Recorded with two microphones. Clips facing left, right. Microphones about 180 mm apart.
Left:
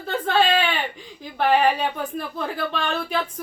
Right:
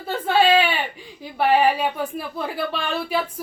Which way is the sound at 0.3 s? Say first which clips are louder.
Right 3 dB; 10° right (ahead or behind).